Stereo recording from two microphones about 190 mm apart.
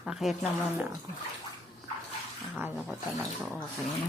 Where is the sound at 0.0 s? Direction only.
Centre (ahead or behind).